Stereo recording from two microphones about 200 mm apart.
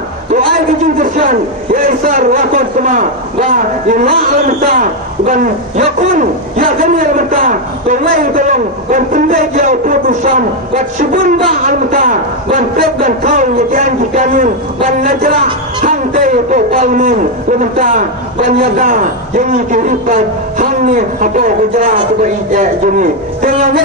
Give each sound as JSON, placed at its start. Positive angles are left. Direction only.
{"t": 0.9, "sound": "a man's voice", "side_deg": -40}